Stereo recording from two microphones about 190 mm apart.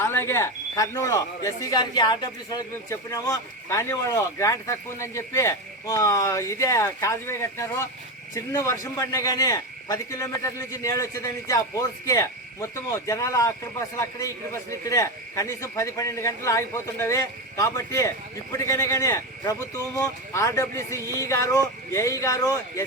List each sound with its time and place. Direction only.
0.0 s speech: 10° left (ahead or behind)